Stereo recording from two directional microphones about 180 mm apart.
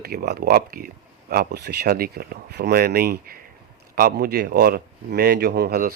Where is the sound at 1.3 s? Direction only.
65° right (ahead or behind).